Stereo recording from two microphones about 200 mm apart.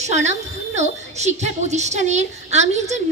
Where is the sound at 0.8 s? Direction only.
35° right (ahead or behind).